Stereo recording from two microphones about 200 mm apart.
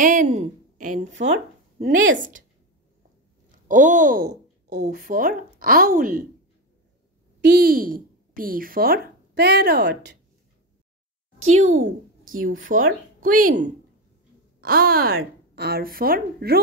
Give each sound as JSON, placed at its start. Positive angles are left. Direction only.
{"t": 0.0, "sound": "a woman's voice", "side_deg": -40}
{"t": 3.5, "sound": "speech", "side_deg": -40}
{"t": 7.4, "sound": "speech", "side_deg": -50}
{"t": 12.3, "sound": "a woman's voice", "side_deg": -45}
{"t": 14.6, "sound": "a woman's voice", "side_deg": -50}